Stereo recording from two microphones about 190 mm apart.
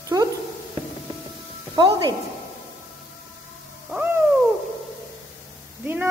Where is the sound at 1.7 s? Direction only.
20° right (ahead or behind).